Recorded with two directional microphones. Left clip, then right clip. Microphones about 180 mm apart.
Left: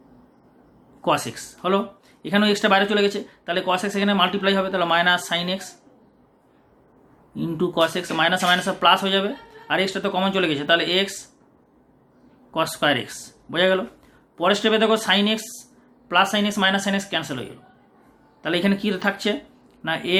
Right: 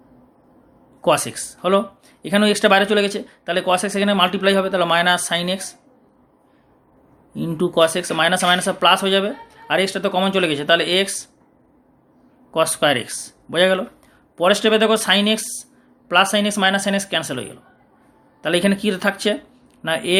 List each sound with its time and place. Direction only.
1.0 s speech: 40° right (ahead or behind)
7.3 s speech: 40° right (ahead or behind)
12.5 s speech: 35° right (ahead or behind)